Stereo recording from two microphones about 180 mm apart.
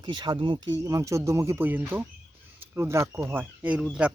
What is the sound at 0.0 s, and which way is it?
Speech, 25° right (ahead or behind).